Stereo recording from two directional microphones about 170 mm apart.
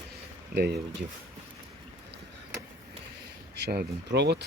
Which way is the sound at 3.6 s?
70° right (ahead or behind).